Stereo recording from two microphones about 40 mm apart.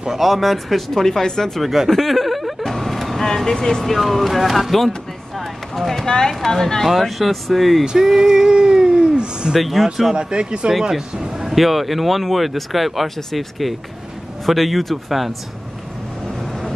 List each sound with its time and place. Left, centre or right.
0.1 s speech: centre
1.6 s speech: centre
1.9 s vehicle: centre
3.3 s speech: centre
6.9 s speech: centre
8.0 s speech: centre
9.6 s speech: centre
10.1 s speech: right
10.7 s speech: centre